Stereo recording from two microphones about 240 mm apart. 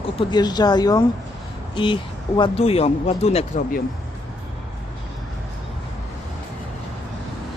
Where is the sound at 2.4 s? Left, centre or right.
Left.